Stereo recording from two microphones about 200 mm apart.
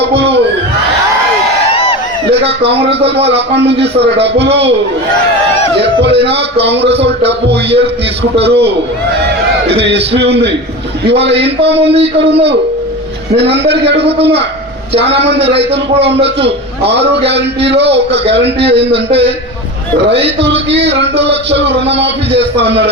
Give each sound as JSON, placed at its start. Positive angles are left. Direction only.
{"t": 0.2, "sound": "crowd", "side_deg": -60}
{"t": 3.2, "sound": "speech", "side_deg": -60}
{"t": 5.7, "sound": "speech", "side_deg": -60}
{"t": 11.9, "sound": "a man's voice", "side_deg": -30}
{"t": 13.3, "sound": "speech", "side_deg": -55}
{"t": 14.1, "sound": "a man's voice", "side_deg": -30}
{"t": 15.0, "sound": "speech", "side_deg": -60}